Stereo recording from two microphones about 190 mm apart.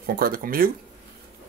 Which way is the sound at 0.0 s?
50° right (ahead or behind).